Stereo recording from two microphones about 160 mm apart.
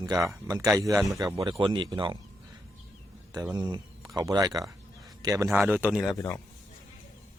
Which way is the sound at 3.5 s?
25° right (ahead or behind).